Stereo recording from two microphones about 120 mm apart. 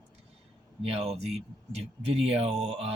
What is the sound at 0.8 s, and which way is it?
Speech, 55° right (ahead or behind).